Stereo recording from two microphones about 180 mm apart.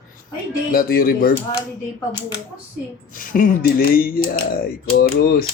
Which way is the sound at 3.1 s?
50° left (ahead or behind).